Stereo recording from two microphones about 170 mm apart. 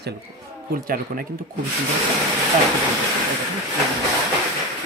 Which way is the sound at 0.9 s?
60° right (ahead or behind).